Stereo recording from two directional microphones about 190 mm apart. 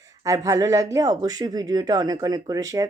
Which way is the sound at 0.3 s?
15° right (ahead or behind).